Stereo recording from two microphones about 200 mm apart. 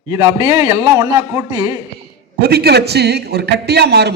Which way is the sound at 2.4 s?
50° right (ahead or behind).